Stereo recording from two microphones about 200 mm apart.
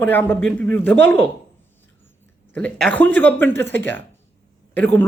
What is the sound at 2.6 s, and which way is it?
A man's voice, 5° left (ahead or behind).